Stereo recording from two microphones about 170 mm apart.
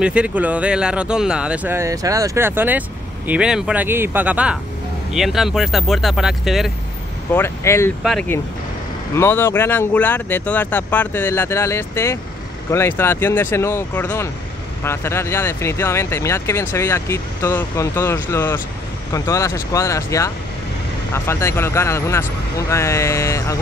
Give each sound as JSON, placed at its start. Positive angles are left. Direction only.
{"t": 0.0, "sound": "speech", "side_deg": -5}
{"t": 7.3, "sound": "speech", "side_deg": 15}
{"t": 8.0, "sound": "speech", "side_deg": 0}
{"t": 9.1, "sound": "speech", "side_deg": 15}